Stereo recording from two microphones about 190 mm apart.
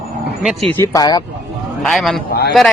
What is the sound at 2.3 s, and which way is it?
Speech, 55° left (ahead or behind).